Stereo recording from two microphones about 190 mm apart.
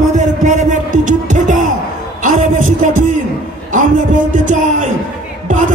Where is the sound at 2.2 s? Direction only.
45° right (ahead or behind).